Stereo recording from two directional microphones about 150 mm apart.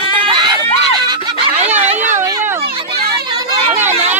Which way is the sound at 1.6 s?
45° right (ahead or behind).